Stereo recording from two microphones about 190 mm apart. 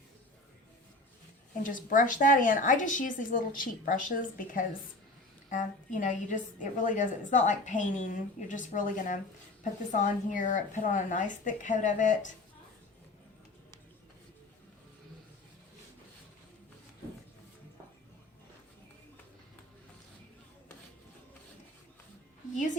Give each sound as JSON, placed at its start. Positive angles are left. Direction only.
{"t": 1.6, "sound": "a woman's voice", "side_deg": 45}